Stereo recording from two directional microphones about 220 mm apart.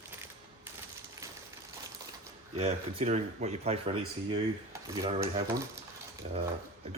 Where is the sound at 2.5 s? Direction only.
25° right (ahead or behind).